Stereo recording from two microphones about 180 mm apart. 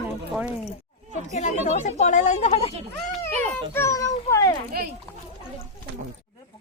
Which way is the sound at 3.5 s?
15° left (ahead or behind).